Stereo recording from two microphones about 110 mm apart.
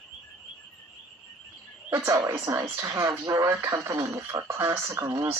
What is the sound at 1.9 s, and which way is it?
Speech, 30° right (ahead or behind).